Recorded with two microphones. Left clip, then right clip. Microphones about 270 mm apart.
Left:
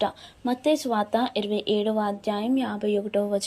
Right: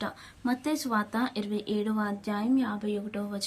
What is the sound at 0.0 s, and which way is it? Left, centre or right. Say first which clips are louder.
A woman's voice: left 7 dB; centre.